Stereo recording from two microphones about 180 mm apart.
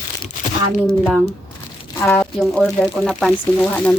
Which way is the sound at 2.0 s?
15° left (ahead or behind).